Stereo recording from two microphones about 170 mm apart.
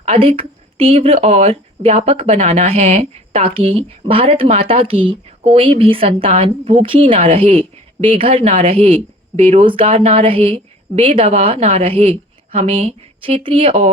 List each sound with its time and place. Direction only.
0.0 s speech: 35° right (ahead or behind)